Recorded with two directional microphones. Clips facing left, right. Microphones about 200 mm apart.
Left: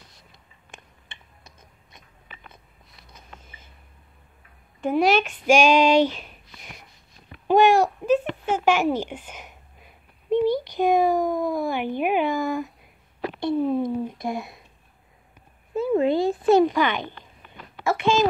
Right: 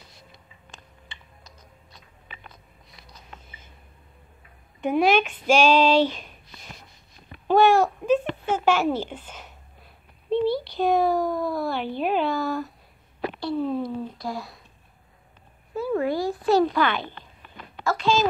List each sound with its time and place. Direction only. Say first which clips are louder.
1.4 s tick-tock: right 2 dB; 20° left (ahead or behind)
4.8 s speech: even; 5° left (ahead or behind)
7.4 s babbling: left 1 dB; 10° left (ahead or behind)
13.4 s a sound: left 4 dB; 20° left (ahead or behind)
14.1 s speech: left 3 dB; 20° left (ahead or behind)
15.7 s a child's voice: left 4 dB; 20° left (ahead or behind)